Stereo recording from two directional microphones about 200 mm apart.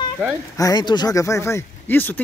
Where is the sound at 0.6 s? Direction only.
20° left (ahead or behind).